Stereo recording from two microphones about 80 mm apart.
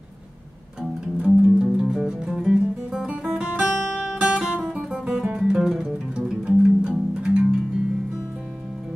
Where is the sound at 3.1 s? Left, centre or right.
Centre.